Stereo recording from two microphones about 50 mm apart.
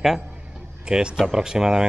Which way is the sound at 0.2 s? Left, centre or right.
Right.